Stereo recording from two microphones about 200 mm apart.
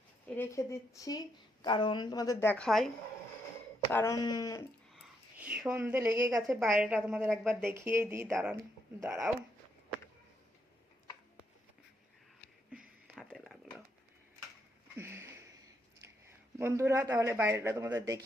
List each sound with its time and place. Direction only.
0.3 s speech: 15° left (ahead or behind)
3.9 s speech: 15° left (ahead or behind)
4.9 s speech: 5° right (ahead or behind)
6.5 s a woman's voice: centre (ahead or behind)
8.3 s speech: centre (ahead or behind)
9.0 s a woman's voice: 15° right (ahead or behind)
12.7 s a sound: centre (ahead or behind)
14.9 s a sound: 10° right (ahead or behind)
16.6 s a woman's voice: 10° right (ahead or behind)